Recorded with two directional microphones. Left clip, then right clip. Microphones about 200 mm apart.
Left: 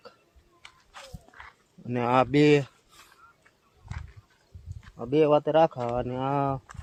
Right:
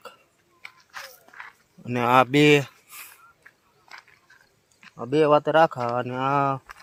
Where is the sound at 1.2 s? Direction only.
25° right (ahead or behind).